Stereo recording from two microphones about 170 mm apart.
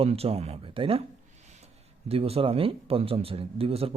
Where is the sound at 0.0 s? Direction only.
35° right (ahead or behind).